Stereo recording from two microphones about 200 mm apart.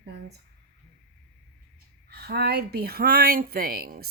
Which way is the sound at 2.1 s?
50° right (ahead or behind).